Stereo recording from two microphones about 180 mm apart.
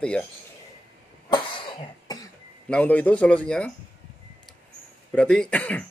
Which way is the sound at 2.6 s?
5° left (ahead or behind).